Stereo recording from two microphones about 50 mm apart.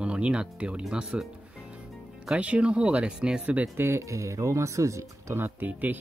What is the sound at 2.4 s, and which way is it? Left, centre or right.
Speech, right.